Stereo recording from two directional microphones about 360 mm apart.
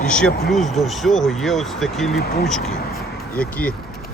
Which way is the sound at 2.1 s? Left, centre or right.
Left.